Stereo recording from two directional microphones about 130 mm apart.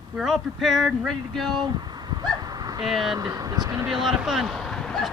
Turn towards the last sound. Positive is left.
turn(degrees=5)  # may be behind; listen again after turning